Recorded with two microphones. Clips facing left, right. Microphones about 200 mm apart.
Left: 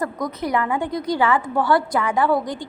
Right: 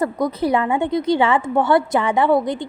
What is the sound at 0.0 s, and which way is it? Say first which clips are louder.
A woman's voice: right 5 dB; 30° right (ahead or behind).